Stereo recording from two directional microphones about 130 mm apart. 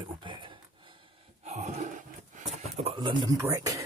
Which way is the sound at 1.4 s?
60° right (ahead or behind).